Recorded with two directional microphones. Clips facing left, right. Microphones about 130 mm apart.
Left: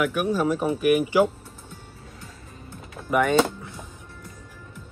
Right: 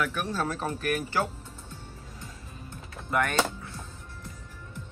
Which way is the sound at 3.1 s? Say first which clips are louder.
Left 7 dB; 15° left (ahead or behind).